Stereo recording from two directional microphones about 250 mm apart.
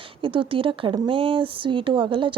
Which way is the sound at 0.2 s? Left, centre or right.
Right.